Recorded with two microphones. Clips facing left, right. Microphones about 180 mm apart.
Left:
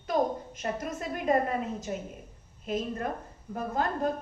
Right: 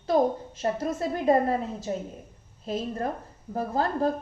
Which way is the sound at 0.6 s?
30° right (ahead or behind).